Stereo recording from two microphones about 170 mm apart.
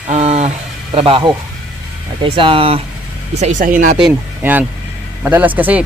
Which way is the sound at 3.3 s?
45° right (ahead or behind).